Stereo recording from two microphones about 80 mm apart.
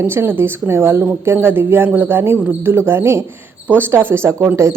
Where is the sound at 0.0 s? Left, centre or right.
Right.